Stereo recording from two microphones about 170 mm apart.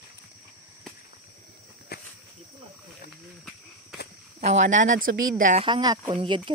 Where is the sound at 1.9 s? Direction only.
70° left (ahead or behind).